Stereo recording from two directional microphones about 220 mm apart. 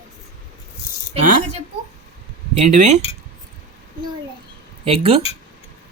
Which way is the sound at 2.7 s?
30° right (ahead or behind).